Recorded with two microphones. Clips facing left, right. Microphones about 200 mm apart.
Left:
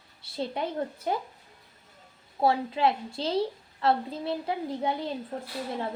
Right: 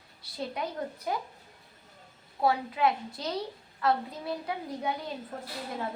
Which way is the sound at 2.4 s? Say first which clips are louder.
Left 2 dB; 30° left (ahead or behind).